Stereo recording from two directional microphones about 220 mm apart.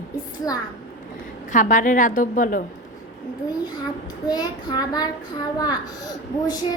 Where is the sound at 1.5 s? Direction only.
35° left (ahead or behind).